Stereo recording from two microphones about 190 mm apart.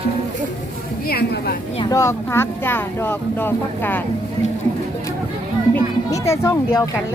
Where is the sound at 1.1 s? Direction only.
55° left (ahead or behind).